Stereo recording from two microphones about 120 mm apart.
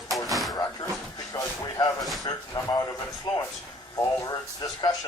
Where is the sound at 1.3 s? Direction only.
30° left (ahead or behind).